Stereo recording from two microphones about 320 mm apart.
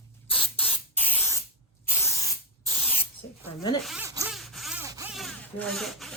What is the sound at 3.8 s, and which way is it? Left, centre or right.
Zipper, centre.